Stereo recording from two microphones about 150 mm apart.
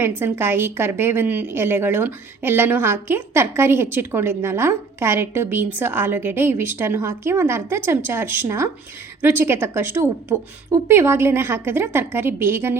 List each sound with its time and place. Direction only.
0.0 s a woman's voice: 15° right (ahead or behind)